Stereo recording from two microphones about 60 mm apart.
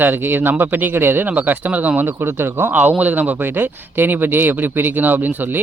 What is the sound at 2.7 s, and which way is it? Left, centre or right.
Speech, right.